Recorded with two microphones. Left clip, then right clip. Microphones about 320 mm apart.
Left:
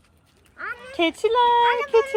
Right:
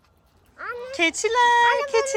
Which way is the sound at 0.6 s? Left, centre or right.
Right.